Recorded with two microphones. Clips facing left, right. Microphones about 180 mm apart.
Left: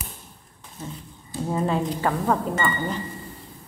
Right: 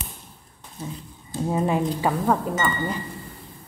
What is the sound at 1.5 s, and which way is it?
Speech, 15° right (ahead or behind).